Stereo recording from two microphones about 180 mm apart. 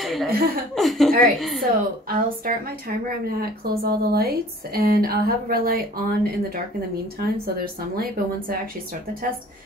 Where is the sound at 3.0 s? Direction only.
55° right (ahead or behind).